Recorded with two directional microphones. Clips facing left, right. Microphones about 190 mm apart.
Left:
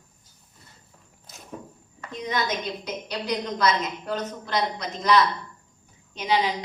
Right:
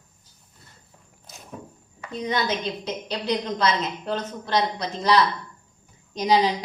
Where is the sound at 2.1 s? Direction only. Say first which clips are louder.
Right 2 dB; 30° right (ahead or behind).